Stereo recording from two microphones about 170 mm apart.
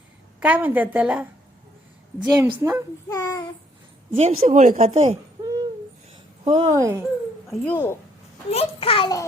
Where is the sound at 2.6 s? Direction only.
15° right (ahead or behind).